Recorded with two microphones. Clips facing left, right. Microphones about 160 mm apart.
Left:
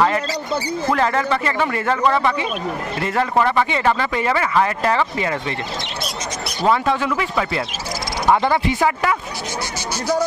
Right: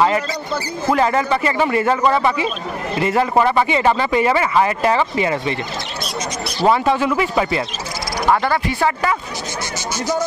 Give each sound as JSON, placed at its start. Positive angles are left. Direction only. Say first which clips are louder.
{"t": 0.9, "sound": "speech", "louder": "right 3 dB", "side_deg": -10}
{"t": 6.6, "sound": "speech", "louder": "right 2 dB", "side_deg": -5}
{"t": 8.7, "sound": "speech", "louder": "even", "side_deg": 5}